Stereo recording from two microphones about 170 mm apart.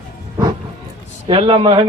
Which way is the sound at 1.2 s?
35° right (ahead or behind).